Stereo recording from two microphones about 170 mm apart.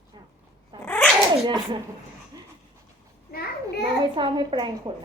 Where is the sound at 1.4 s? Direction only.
30° right (ahead or behind).